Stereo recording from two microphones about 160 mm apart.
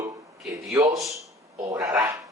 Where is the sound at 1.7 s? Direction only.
20° right (ahead or behind).